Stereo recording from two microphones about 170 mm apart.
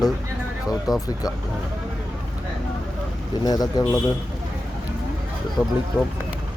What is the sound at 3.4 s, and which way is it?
Speech, 20° left (ahead or behind).